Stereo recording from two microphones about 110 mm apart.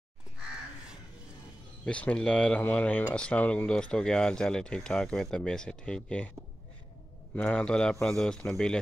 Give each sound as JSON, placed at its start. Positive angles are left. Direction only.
{"t": 1.9, "sound": "speech", "side_deg": 10}
{"t": 7.3, "sound": "speech", "side_deg": 10}